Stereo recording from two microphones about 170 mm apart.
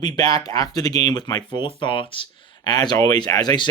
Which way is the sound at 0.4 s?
20° left (ahead or behind).